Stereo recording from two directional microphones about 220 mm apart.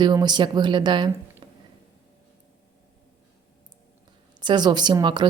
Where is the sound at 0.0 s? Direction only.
20° right (ahead or behind).